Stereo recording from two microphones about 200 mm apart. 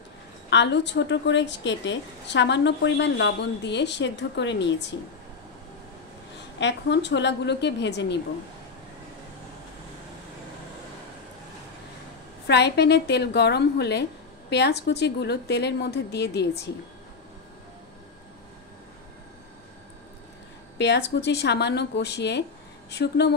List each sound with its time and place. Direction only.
0.5 s a woman's voice: 60° left (ahead or behind)
6.6 s a woman's voice: 60° left (ahead or behind)
12.4 s a woman's voice: 55° left (ahead or behind)
20.7 s a woman's voice: 60° left (ahead or behind)